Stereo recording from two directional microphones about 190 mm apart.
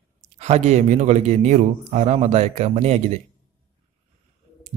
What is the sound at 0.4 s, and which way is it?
A man's voice, 35° right (ahead or behind).